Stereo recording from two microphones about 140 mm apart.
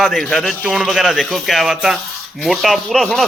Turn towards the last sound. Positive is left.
turn(degrees=5)  # may be behind; listen again after turning